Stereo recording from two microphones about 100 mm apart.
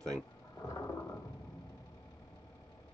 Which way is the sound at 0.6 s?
30° left (ahead or behind).